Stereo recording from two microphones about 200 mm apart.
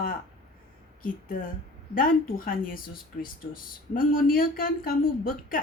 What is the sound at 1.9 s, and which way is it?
Speech, 45° left (ahead or behind).